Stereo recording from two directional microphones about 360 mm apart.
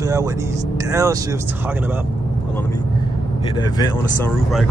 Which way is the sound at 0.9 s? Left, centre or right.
Centre.